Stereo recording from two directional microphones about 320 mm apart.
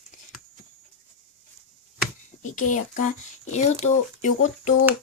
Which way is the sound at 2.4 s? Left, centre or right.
Left.